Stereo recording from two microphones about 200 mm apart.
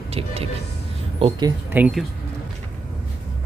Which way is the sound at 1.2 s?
20° right (ahead or behind).